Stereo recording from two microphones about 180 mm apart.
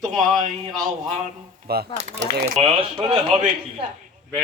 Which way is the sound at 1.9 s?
40° right (ahead or behind).